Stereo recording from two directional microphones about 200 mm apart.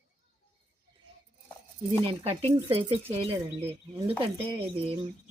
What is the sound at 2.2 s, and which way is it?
Speech, 30° right (ahead or behind).